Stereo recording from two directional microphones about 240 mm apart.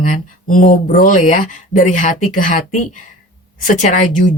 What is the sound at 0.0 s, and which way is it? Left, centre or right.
A woman's voice, left.